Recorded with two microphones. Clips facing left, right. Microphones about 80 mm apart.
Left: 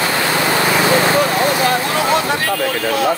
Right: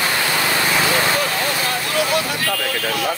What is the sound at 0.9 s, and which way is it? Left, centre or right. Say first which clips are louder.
Vehicle: left 5 dB; left.